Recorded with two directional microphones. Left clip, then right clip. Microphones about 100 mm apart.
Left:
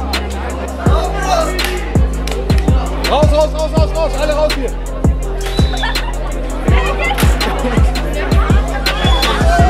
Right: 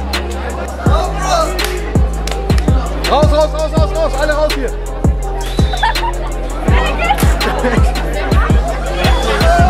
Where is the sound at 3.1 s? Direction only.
30° left (ahead or behind).